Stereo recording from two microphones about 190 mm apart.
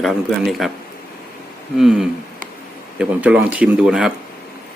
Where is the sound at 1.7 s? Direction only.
Centre (ahead or behind).